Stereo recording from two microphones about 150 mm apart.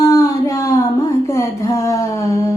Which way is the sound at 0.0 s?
20° left (ahead or behind).